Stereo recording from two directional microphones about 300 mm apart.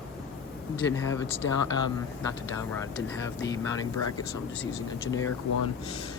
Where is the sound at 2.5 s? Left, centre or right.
Centre.